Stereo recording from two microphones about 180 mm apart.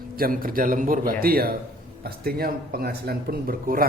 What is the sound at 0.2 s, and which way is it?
A man's voice, 55° right (ahead or behind).